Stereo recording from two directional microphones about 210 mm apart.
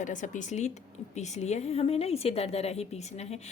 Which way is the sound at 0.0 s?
35° left (ahead or behind).